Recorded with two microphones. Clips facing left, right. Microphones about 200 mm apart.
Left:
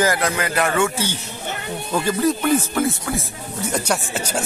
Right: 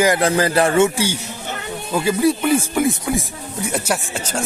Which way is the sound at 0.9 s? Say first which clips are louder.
Right 4 dB; 10° right (ahead or behind).